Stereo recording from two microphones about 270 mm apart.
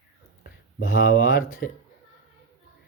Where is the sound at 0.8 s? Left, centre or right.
Left.